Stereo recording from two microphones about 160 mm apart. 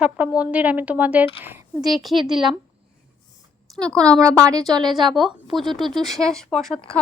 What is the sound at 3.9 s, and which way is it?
Speech, 5° left (ahead or behind).